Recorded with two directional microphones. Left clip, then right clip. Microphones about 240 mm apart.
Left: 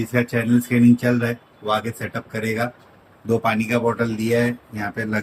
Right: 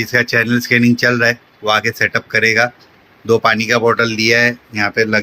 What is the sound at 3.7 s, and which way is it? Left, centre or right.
Speech, right.